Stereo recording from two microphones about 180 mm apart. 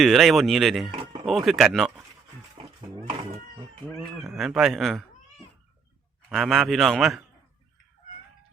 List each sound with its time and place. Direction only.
0.0 s a man's voice: centre (ahead or behind)
2.6 s a sound: 35° right (ahead or behind)
3.8 s cat: 10° right (ahead or behind)
4.4 s a man's voice: centre (ahead or behind)
6.2 s a man's voice: centre (ahead or behind)